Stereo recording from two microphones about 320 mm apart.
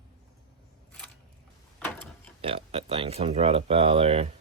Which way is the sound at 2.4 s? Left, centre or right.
Centre.